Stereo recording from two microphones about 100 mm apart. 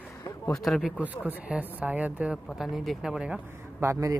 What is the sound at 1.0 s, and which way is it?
Speech, 15° right (ahead or behind).